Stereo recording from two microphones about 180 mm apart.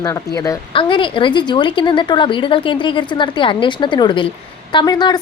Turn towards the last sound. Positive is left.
turn(degrees=20)  # may be behind; listen again after turning